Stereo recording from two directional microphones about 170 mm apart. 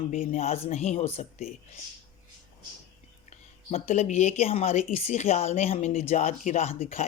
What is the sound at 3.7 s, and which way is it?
Speech, 40° left (ahead or behind).